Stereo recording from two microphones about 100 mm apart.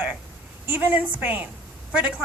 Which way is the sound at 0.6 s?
20° right (ahead or behind).